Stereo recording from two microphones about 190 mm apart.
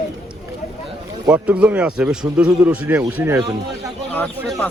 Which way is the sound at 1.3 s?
5° right (ahead or behind).